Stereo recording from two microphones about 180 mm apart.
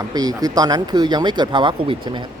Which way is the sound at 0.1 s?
20° right (ahead or behind).